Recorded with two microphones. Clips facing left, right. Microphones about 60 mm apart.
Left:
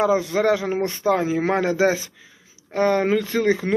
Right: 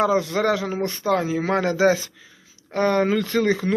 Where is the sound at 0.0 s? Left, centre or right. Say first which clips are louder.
Left 1 dB; centre.